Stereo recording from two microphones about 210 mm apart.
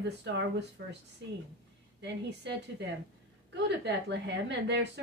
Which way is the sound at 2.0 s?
55° right (ahead or behind).